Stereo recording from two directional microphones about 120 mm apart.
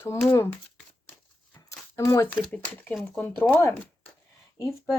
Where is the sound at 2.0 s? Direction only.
25° left (ahead or behind).